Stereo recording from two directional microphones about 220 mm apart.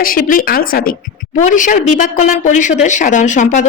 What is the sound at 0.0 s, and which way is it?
A woman's voice, 40° left (ahead or behind).